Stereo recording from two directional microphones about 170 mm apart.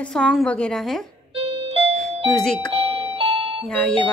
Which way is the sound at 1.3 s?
35° right (ahead or behind).